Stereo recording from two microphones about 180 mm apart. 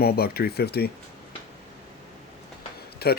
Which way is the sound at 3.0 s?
60° left (ahead or behind).